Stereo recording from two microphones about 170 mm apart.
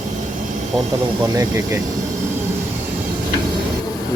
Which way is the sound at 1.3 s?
25° right (ahead or behind).